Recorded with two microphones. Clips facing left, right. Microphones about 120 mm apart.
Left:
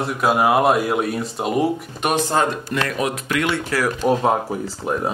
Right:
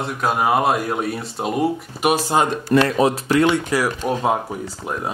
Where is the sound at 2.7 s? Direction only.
30° right (ahead or behind).